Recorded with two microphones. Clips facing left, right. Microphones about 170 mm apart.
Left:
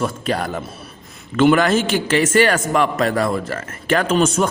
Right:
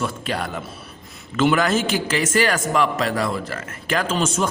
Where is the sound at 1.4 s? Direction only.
55° left (ahead or behind).